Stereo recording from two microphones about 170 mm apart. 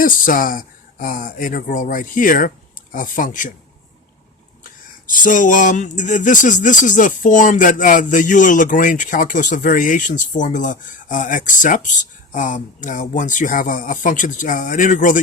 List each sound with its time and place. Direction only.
0.0 s speech: 55° left (ahead or behind)
5.2 s speech: 50° left (ahead or behind)